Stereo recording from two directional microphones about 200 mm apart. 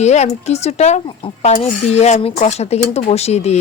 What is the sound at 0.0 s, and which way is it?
Speech, 35° left (ahead or behind).